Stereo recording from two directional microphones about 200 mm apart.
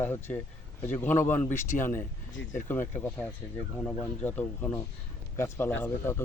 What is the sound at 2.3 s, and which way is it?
Speech, 65° left (ahead or behind).